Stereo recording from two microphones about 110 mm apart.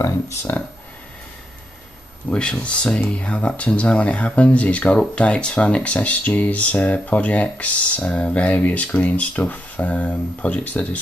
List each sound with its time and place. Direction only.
0.0 s speech: 25° left (ahead or behind)
2.3 s speech: 10° left (ahead or behind)